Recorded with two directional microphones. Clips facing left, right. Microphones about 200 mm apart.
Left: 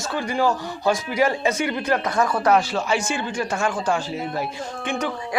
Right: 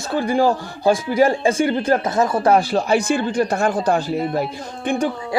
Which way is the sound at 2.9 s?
60° right (ahead or behind).